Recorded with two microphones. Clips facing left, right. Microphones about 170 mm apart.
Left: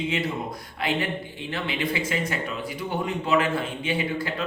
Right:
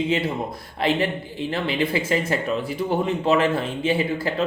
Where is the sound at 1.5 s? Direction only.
35° right (ahead or behind).